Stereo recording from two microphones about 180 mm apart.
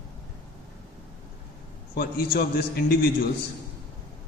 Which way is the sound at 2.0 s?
60° left (ahead or behind).